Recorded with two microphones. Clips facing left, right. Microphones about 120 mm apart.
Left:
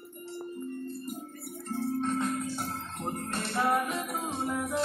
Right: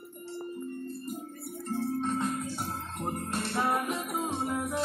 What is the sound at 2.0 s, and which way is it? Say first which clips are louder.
Music: left 1 dB; 10° right (ahead or behind).